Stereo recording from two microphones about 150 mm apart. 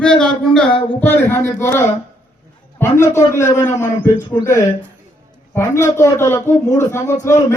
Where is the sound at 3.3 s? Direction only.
15° left (ahead or behind).